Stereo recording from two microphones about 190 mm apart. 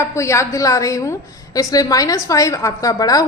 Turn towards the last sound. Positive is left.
turn(degrees=20)  # may be behind; listen again after turning